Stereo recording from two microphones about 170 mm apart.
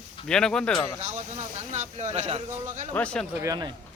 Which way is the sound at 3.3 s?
20° right (ahead or behind).